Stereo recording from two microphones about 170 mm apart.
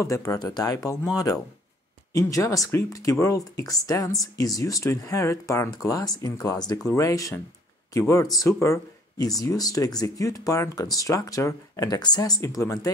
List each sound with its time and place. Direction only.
0.0 s speech: 20° left (ahead or behind)